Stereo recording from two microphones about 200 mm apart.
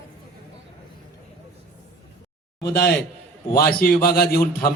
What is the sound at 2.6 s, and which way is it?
A man's voice, 55° left (ahead or behind).